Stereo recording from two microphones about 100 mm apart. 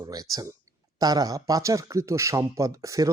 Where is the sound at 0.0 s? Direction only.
40° right (ahead or behind).